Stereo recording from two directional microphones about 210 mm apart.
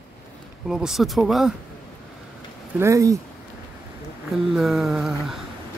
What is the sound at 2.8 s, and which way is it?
Speech, 15° right (ahead or behind).